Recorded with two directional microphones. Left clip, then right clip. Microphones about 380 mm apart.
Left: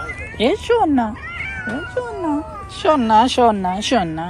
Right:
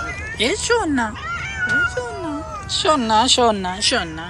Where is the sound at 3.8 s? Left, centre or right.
Centre.